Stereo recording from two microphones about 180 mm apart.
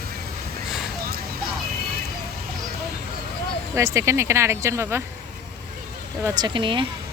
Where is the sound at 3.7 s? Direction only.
15° right (ahead or behind).